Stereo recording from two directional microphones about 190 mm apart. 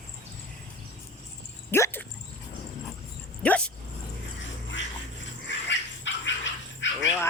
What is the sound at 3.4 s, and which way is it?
Dog, 5° left (ahead or behind).